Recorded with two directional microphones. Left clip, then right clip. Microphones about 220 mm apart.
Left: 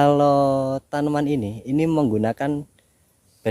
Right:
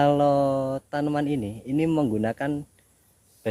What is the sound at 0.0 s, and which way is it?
A man's voice, 45° left (ahead or behind).